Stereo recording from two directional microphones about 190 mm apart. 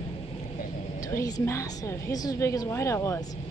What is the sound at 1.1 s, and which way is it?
A woman's voice, 20° left (ahead or behind).